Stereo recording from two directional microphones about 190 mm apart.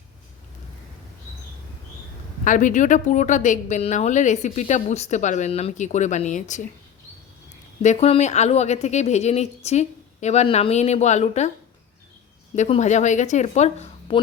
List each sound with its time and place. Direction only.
2.4 s a woman's voice: 45° left (ahead or behind)
7.8 s a woman's voice: 35° left (ahead or behind)
12.5 s a woman's voice: 35° left (ahead or behind)